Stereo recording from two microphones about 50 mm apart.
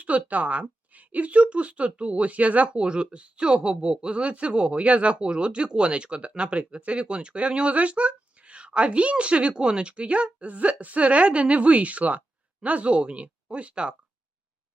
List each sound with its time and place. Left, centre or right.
0.0 s speech: right